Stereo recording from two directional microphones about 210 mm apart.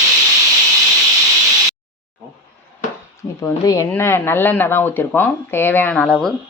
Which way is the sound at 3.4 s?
15° left (ahead or behind).